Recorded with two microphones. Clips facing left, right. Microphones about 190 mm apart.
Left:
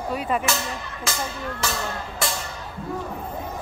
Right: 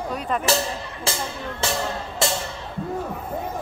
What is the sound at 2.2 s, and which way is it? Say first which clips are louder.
Music: right 5 dB; 25° right (ahead or behind).